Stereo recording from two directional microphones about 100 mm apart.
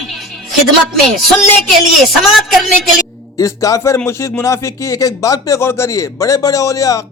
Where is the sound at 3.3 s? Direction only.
35° left (ahead or behind).